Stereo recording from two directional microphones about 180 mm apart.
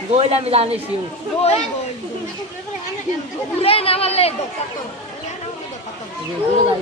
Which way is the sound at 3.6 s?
30° left (ahead or behind).